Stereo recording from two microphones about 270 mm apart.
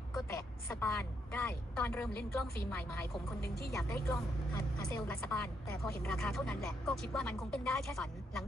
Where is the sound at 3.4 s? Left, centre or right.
Left.